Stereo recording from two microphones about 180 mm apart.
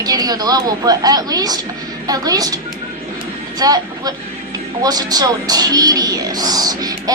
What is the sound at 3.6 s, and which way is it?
A woman's voice, 20° right (ahead or behind).